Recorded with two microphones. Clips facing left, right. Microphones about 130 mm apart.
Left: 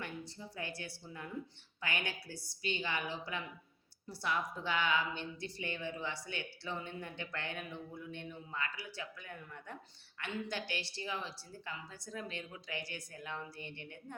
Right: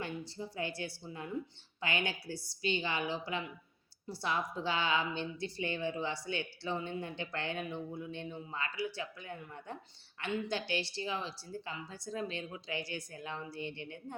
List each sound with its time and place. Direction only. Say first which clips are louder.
0.0 s a woman's voice: right 5 dB; 25° right (ahead or behind)